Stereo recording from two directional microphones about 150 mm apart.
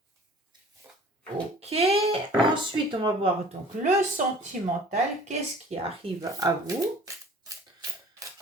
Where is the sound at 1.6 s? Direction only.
40° right (ahead or behind).